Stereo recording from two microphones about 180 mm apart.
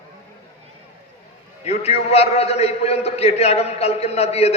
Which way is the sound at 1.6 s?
35° left (ahead or behind).